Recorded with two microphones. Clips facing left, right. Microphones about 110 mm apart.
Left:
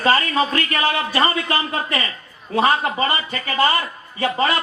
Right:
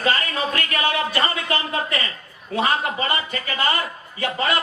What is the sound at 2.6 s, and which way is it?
A man's voice, 35° left (ahead or behind).